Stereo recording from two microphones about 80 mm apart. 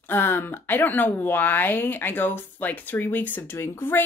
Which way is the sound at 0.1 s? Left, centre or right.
Left.